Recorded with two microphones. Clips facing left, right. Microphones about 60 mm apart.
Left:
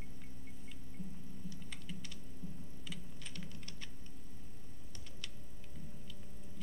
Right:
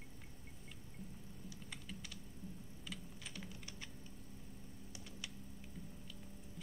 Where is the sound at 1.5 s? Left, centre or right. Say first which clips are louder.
Left 2 dB; centre.